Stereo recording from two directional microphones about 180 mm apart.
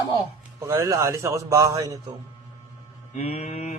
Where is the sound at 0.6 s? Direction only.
15° right (ahead or behind).